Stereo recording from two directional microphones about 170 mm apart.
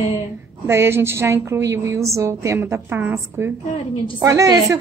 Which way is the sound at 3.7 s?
35° left (ahead or behind).